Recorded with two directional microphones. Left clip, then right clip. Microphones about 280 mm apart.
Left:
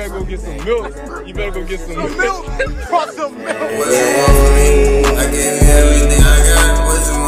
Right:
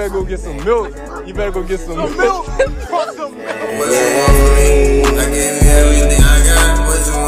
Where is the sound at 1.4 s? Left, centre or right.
Centre.